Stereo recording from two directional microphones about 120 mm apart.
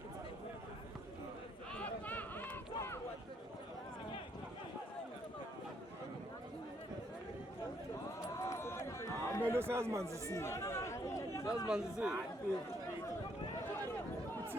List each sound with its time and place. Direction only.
1.7 s run: 10° left (ahead or behind)
8.4 s run: 25° left (ahead or behind)
9.5 s speech: 20° right (ahead or behind)
10.3 s chatter: 25° left (ahead or behind)
11.7 s speech: 5° right (ahead or behind)